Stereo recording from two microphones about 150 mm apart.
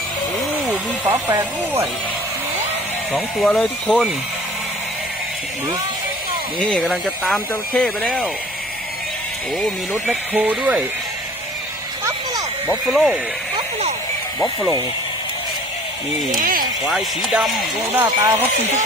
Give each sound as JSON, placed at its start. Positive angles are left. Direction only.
{"t": 1.0, "sound": "speech", "side_deg": -15}
{"t": 3.4, "sound": "speech", "side_deg": 5}
{"t": 6.6, "sound": "speech", "side_deg": 5}
{"t": 10.1, "sound": "speech", "side_deg": -10}
{"t": 12.9, "sound": "speech", "side_deg": 0}
{"t": 16.4, "sound": "speech", "side_deg": -70}
{"t": 16.8, "sound": "speech", "side_deg": 0}
{"t": 17.9, "sound": "speech", "side_deg": -15}